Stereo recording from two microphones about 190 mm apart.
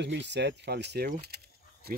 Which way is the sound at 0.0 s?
65° right (ahead or behind).